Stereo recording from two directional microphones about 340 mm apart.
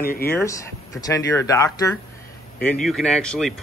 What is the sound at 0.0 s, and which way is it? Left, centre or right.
Speech, left.